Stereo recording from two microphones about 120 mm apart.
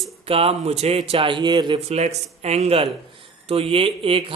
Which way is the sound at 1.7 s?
60° right (ahead or behind).